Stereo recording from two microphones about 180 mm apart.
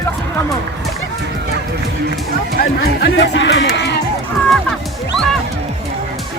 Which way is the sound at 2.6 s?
65° left (ahead or behind).